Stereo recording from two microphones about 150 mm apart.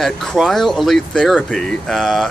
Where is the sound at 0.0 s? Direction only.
Centre (ahead or behind).